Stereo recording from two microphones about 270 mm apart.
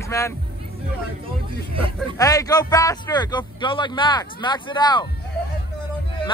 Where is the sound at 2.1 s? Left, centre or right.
Centre.